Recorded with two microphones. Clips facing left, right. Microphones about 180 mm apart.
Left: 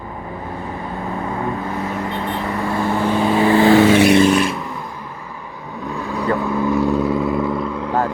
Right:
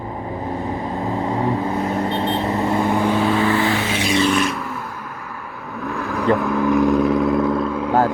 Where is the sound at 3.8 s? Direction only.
60° left (ahead or behind).